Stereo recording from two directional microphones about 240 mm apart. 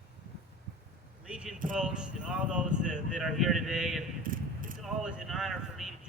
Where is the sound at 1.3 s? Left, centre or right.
Centre.